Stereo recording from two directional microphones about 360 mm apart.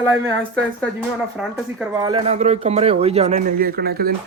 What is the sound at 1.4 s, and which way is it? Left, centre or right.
Speech, centre.